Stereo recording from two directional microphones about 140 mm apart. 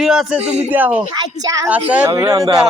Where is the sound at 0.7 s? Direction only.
10° right (ahead or behind).